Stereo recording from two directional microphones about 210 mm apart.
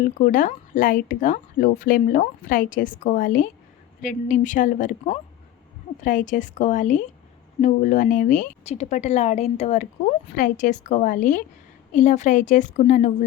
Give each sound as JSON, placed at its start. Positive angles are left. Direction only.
{"t": 0.1, "sound": "speech", "side_deg": 40}